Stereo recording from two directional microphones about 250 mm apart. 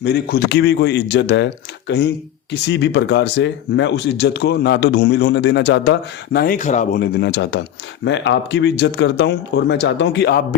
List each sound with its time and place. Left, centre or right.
0.0 s speech: left